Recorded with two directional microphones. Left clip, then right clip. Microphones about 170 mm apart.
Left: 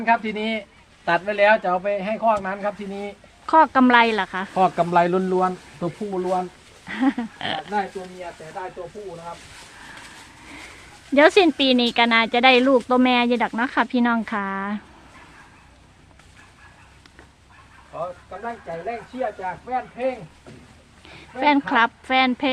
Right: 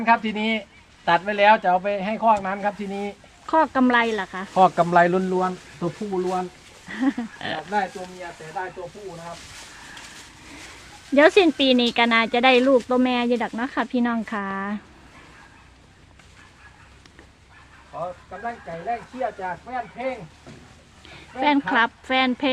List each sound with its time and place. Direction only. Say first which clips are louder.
0.0 s speech: right 1 dB; 20° right (ahead or behind)
1.0 s speech: right 1 dB; centre (ahead or behind)
3.4 s speech: left 4 dB; 15° left (ahead or behind)
4.5 s speech: right 2 dB; 5° right (ahead or behind)
5.3 s speech: left 2 dB; 20° left (ahead or behind)
8.6 s speech: right 3 dB; 30° left (ahead or behind)
11.1 s speech: left 1 dB; 5° left (ahead or behind)
17.9 s speech: left 1 dB; 45° left (ahead or behind)
18.9 s speech: right 1 dB; 55° left (ahead or behind)
21.3 s speech: left 2 dB; 10° left (ahead or behind)